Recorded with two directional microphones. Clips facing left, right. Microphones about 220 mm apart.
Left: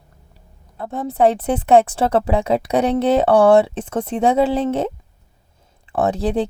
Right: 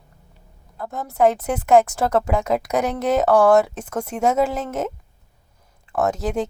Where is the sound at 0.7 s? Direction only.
30° left (ahead or behind).